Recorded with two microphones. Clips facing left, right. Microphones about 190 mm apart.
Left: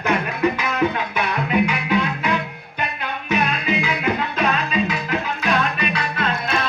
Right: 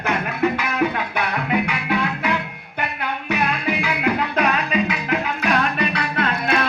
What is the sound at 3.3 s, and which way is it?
Music, 20° left (ahead or behind).